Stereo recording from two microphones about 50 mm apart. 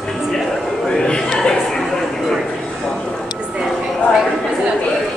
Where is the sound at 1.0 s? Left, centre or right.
Centre.